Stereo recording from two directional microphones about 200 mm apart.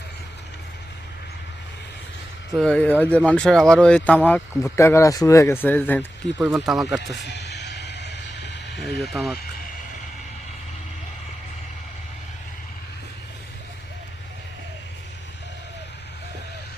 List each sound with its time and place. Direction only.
2.6 s speech: 5° left (ahead or behind)
6.7 s speech: centre (ahead or behind)
7.3 s music: 60° left (ahead or behind)
9.0 s speech: centre (ahead or behind)